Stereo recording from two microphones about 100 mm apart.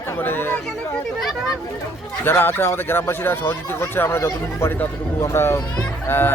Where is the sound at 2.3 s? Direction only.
20° left (ahead or behind).